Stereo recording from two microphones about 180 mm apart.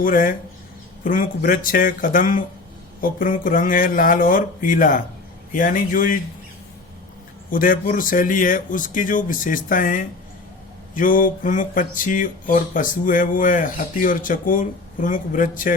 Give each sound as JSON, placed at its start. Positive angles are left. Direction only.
{"t": 0.0, "sound": "speech", "side_deg": 50}
{"t": 7.5, "sound": "speech", "side_deg": 50}